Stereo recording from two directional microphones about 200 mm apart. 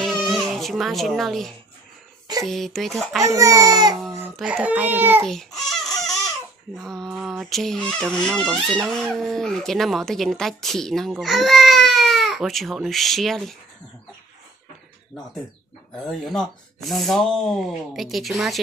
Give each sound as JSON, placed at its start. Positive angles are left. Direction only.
{"t": 0.0, "sound": "baby cry", "side_deg": 0}
{"t": 0.4, "sound": "a child's voice", "side_deg": 0}
{"t": 3.2, "sound": "speech", "side_deg": -15}
{"t": 4.4, "sound": "speech", "side_deg": -5}
{"t": 5.2, "sound": "baby cry", "side_deg": 0}
{"t": 6.8, "sound": "speech", "side_deg": 0}
{"t": 16.0, "sound": "speech", "side_deg": 0}